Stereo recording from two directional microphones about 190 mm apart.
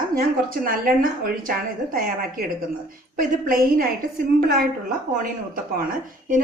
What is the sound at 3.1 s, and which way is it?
Speech, 50° right (ahead or behind).